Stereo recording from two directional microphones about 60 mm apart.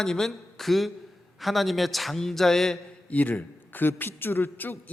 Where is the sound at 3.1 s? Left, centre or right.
Left.